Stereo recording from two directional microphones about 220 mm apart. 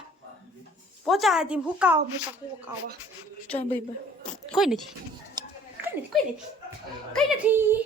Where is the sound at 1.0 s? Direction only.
Centre (ahead or behind).